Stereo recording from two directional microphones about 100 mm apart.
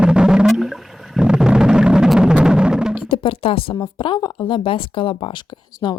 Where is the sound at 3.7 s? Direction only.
50° left (ahead or behind).